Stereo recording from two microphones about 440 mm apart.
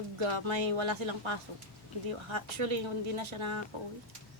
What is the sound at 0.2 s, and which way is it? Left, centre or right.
A woman's voice, right.